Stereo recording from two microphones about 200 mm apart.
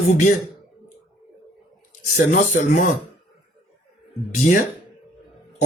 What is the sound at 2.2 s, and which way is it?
Speech, 40° left (ahead or behind).